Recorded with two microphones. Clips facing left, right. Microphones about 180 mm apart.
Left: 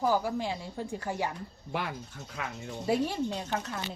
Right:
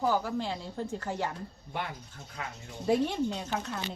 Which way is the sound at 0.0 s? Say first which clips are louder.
Left 1 dB; 10° left (ahead or behind).